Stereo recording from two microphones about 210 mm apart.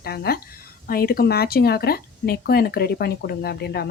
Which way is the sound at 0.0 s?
45° left (ahead or behind).